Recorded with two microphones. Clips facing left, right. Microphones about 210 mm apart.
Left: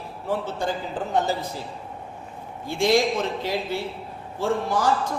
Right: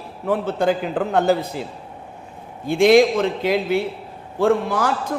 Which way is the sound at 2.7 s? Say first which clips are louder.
Right 7 dB; 60° right (ahead or behind).